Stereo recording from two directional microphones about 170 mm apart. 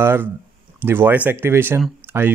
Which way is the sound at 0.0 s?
15° right (ahead or behind).